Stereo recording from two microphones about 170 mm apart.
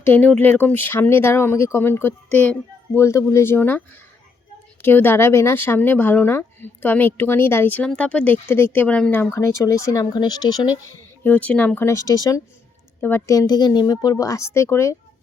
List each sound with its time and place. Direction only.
0.0 s speech: 10° left (ahead or behind)
11.2 s speech: 10° left (ahead or behind)